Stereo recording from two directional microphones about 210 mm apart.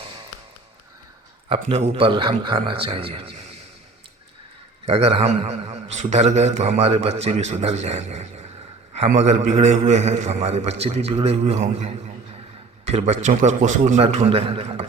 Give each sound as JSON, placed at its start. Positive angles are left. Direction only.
{"t": 1.7, "sound": "a man's voice", "side_deg": -25}
{"t": 4.9, "sound": "a man's voice", "side_deg": -30}